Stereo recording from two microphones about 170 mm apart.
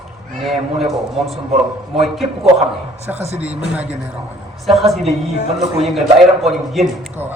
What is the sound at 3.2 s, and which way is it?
Speech, 40° right (ahead or behind).